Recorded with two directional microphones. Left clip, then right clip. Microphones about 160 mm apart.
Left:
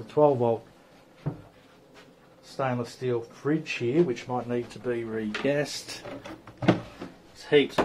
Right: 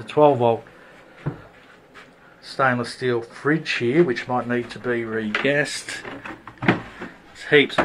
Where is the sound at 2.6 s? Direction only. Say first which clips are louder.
Right 9 dB; 5° right (ahead or behind).